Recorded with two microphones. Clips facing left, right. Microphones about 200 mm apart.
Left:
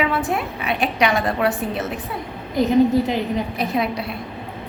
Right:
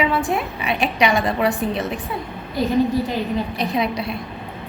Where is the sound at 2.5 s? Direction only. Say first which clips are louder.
Left 3 dB; 20° left (ahead or behind).